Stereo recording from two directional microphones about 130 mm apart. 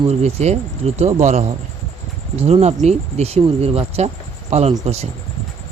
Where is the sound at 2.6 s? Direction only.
55° right (ahead or behind).